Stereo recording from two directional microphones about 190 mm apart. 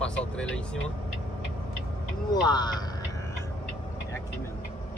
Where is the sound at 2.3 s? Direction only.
20° left (ahead or behind).